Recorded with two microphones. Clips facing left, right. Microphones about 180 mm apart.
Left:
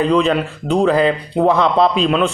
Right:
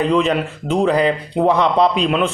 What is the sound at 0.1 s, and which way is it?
Speech, 20° right (ahead or behind).